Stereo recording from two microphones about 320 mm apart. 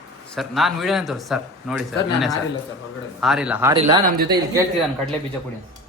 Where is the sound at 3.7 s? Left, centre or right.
Centre.